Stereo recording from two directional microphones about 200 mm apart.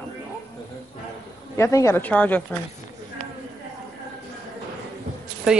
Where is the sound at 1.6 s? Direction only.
15° left (ahead or behind).